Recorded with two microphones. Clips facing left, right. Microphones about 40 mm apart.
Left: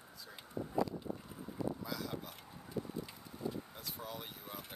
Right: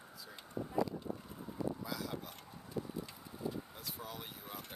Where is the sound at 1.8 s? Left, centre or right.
Centre.